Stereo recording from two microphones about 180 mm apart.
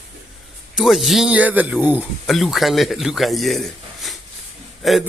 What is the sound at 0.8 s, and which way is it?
A man's voice, centre (ahead or behind).